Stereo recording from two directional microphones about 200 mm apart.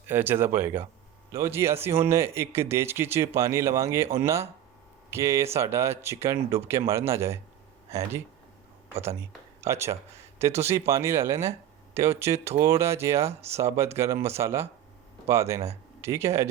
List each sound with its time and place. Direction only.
0.1 s speech: 10° right (ahead or behind)
9.6 s speech: 15° right (ahead or behind)